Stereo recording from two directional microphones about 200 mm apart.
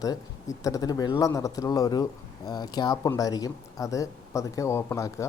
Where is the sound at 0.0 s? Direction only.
15° left (ahead or behind).